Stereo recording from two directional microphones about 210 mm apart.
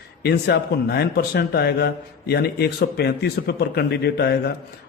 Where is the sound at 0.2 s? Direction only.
50° left (ahead or behind).